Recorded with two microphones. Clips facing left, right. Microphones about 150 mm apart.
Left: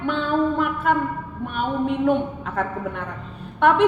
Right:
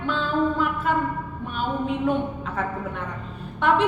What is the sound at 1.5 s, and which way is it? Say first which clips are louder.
A woman's voice: left 3 dB; 60° left (ahead or behind).